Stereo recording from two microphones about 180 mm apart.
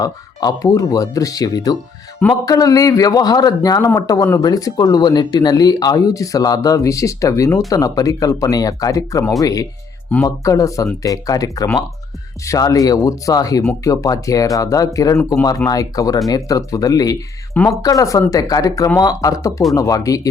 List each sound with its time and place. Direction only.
0.0 s a man's voice: 20° left (ahead or behind)
17.5 s speech: 5° left (ahead or behind)
17.8 s a man's voice: 20° left (ahead or behind)